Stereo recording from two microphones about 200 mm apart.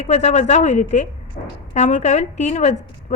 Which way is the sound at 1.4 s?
40° left (ahead or behind).